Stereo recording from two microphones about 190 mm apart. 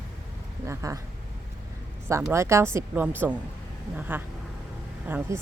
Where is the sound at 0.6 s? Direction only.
15° right (ahead or behind).